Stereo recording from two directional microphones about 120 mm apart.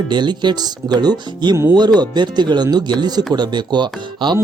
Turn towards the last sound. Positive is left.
turn(degrees=-40)  # may be behind; listen again after turning